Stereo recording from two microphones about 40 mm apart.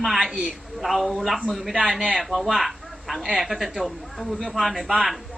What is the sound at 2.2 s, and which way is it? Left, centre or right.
A man's voice, centre.